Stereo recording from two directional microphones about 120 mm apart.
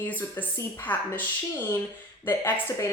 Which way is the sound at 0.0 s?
15° left (ahead or behind).